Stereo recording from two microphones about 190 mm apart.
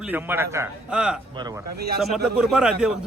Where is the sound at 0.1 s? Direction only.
10° right (ahead or behind).